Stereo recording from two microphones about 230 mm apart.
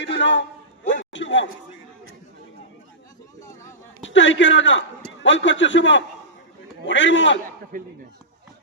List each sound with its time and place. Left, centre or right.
0.0 s a man's voice: left
4.0 s a man's voice: left
7.7 s speech: right